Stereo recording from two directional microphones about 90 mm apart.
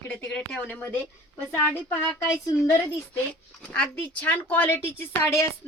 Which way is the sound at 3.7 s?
15° left (ahead or behind).